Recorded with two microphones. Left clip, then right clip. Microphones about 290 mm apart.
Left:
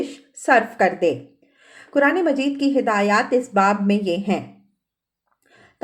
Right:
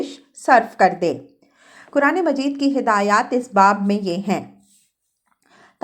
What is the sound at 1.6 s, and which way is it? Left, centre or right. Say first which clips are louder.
A woman's voice: even; centre.